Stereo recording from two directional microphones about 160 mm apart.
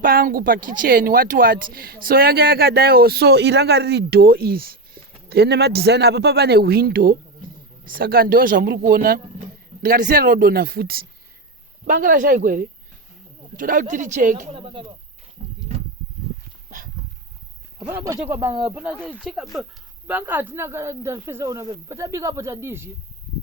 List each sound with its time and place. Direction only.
0.0 s speech: 65° right (ahead or behind)
5.3 s speech: 90° right; by 11.0 s 70° right (ahead or behind)
11.9 s speech: 55° right (ahead or behind)
14.5 s speech: 30° right (ahead or behind)
15.4 s wild animals: 50° right (ahead or behind)
16.6 s dog: 55° right (ahead or behind)
17.9 s speech: 20° right (ahead or behind)
18.9 s speech: centre (ahead or behind); by 22.9 s 15° right (ahead or behind)